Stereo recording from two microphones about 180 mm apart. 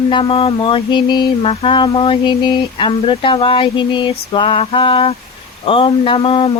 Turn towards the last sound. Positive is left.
turn(degrees=30)  # may be behind; listen again after turning